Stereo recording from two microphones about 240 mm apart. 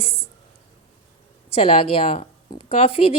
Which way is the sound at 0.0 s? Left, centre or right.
Left.